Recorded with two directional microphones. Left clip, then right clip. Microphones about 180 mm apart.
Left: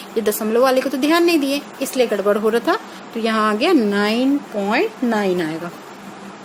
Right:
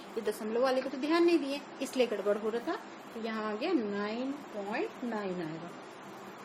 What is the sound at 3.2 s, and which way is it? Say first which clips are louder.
Speech: left 18 dB; 45° left (ahead or behind).